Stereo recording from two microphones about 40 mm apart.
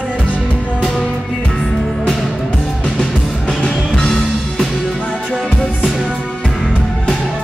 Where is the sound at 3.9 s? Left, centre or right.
Centre.